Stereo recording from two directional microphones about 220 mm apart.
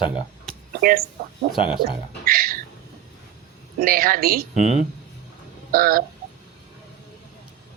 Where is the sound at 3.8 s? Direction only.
40° right (ahead or behind).